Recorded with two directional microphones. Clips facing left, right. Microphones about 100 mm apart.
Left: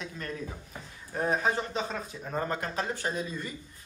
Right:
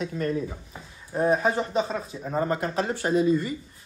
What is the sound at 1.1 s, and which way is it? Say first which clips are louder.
Speech: right 7 dB; 10° right (ahead or behind).